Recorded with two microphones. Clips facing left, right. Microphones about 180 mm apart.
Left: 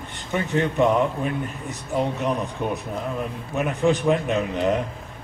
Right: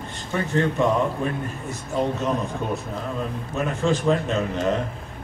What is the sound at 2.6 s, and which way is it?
A man's voice, 15° left (ahead or behind).